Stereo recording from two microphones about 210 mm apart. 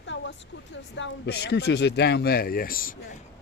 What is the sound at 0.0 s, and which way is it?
Speech, 60° left (ahead or behind).